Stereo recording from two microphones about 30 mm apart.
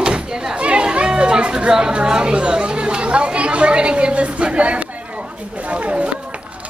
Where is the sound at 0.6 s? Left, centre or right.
Right.